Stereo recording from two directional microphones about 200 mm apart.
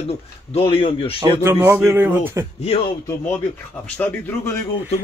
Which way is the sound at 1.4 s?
10° right (ahead or behind).